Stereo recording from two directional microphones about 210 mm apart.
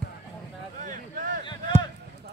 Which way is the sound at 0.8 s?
40° right (ahead or behind).